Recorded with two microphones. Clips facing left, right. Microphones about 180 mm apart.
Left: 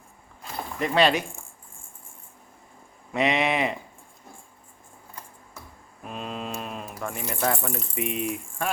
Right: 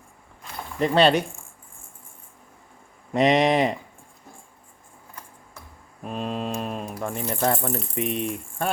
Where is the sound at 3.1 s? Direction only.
40° right (ahead or behind).